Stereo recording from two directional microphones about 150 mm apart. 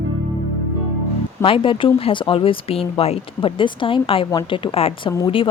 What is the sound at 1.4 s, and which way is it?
A woman's voice, 35° left (ahead or behind).